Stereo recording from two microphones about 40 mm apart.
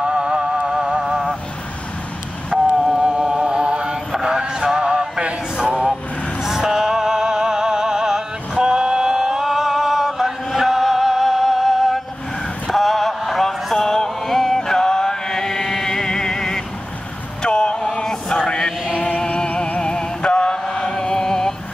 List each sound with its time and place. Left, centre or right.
0.0 s music: centre
2.7 s mantra: centre
4.1 s music: centre
6.4 s music: centre
12.6 s a sound: centre
13.4 s mantra: centre
17.4 s vehicle: left
18.9 s music: left
19.8 s chant: left